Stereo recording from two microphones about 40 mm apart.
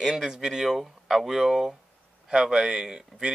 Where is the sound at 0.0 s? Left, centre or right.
Centre.